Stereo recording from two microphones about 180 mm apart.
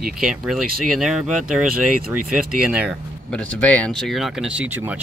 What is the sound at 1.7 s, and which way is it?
Speech, 55° right (ahead or behind).